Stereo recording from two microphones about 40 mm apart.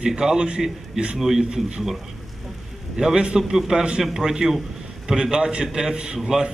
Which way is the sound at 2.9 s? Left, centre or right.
Centre.